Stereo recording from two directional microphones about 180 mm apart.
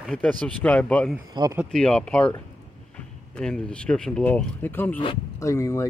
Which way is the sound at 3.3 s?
5° left (ahead or behind).